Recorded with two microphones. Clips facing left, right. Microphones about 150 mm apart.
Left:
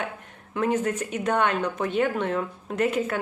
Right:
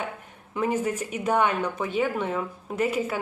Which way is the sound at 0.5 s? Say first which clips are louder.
Left 1 dB; 10° right (ahead or behind).